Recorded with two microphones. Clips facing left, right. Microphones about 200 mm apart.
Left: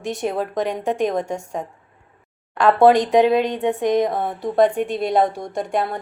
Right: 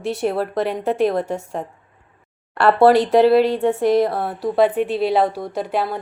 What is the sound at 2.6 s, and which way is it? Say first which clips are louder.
Speech: right 1 dB; 10° right (ahead or behind).